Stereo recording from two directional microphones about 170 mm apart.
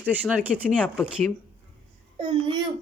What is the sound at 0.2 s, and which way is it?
Speech, 10° right (ahead or behind).